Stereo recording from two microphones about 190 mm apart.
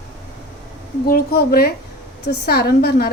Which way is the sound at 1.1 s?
50° left (ahead or behind).